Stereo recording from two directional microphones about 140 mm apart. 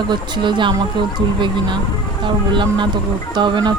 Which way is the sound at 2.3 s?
35° right (ahead or behind).